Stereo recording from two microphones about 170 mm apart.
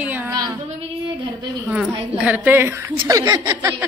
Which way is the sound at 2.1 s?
10° right (ahead or behind).